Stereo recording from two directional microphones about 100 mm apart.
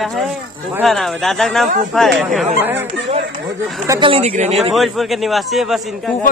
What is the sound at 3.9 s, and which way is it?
Speech, 70° right (ahead or behind).